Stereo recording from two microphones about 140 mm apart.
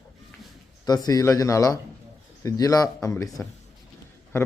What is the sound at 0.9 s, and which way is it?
A man's voice, 25° left (ahead or behind).